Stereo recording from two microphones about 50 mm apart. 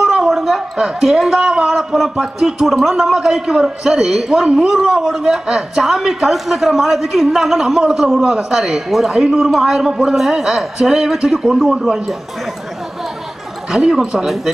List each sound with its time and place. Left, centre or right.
0.0 s a sound: centre
0.7 s a man's voice: centre
13.7 s a man's voice: centre